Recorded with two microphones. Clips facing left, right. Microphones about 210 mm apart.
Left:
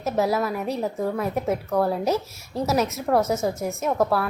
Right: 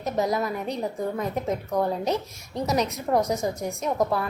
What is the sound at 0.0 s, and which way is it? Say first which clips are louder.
A woman's voice: left 2 dB; 5° left (ahead or behind).